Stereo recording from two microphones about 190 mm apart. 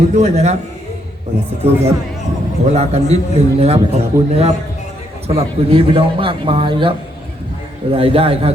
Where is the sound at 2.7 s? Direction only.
35° right (ahead or behind).